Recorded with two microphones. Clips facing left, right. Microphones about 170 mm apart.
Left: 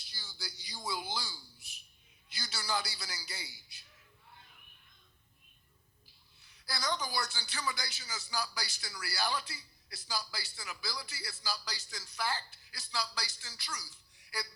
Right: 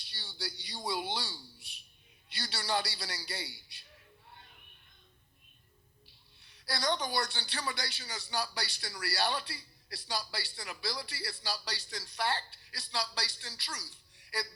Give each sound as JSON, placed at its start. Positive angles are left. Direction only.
{"t": 0.2, "sound": "a sound", "side_deg": -30}
{"t": 2.4, "sound": "a man's voice", "side_deg": -30}
{"t": 6.5, "sound": "a man's voice", "side_deg": -30}